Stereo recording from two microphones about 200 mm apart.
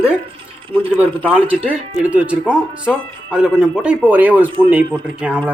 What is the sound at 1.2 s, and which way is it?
A man's voice, 5° right (ahead or behind).